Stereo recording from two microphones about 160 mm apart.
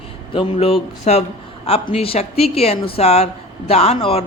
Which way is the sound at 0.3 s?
35° left (ahead or behind).